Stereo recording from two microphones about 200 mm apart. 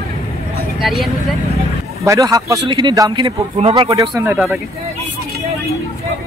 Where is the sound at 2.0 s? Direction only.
15° right (ahead or behind).